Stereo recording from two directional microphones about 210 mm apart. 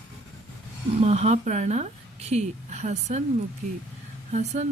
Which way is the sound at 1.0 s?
30° right (ahead or behind).